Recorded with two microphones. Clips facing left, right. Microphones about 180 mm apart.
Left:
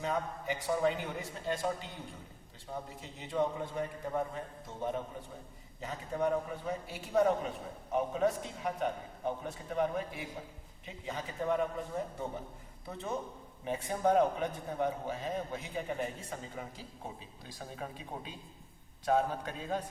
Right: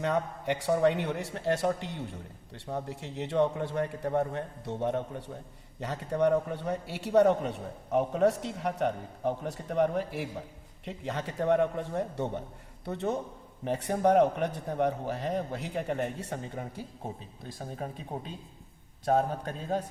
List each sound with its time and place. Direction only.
0.0 s a man's voice: 75° right (ahead or behind)
17.6 s speech: 40° right (ahead or behind)